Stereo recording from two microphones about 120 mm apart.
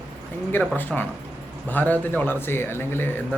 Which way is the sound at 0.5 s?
15° left (ahead or behind).